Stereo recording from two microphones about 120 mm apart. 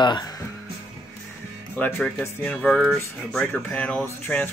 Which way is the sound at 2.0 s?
10° left (ahead or behind).